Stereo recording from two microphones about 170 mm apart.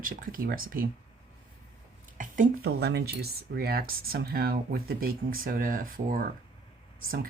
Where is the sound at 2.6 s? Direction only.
75° right (ahead or behind).